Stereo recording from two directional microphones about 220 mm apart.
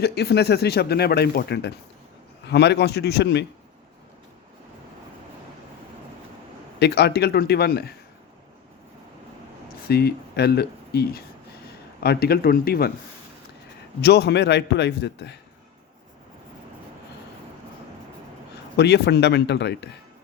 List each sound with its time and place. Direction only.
0.0 s speech: 45° left (ahead or behind)
6.7 s speech: 50° left (ahead or behind)
9.9 s speech: 45° left (ahead or behind)
14.0 s speech: 50° left (ahead or behind)
18.8 s speech: 50° left (ahead or behind)